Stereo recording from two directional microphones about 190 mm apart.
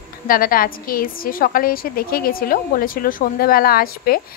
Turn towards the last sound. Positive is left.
turn(degrees=50)  # may be behind; listen again after turning